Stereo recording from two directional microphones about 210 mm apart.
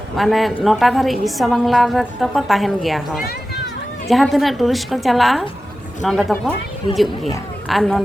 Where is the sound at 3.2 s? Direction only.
55° left (ahead or behind).